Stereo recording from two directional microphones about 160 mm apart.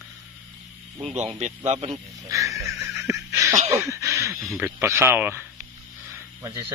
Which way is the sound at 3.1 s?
20° right (ahead or behind).